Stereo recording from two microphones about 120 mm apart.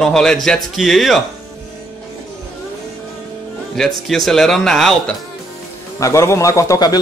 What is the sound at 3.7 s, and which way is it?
Speech, 5° left (ahead or behind).